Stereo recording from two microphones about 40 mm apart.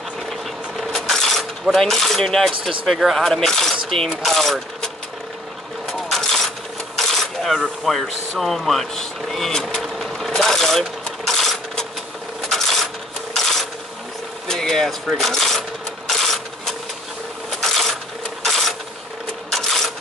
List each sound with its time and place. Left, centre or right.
0.3 s mechanisms: centre
3.2 s speech: centre
5.9 s a sound: centre
7.9 s speech: centre
9.7 s vehicle: centre
12.4 s a sound: centre
13.3 s mechanisms: centre
14.5 s a sound: centre
15.1 s speech: centre
16.1 s mechanisms: centre
17.5 s a sound: centre
18.4 s mechanisms: centre
19.5 s cash register: centre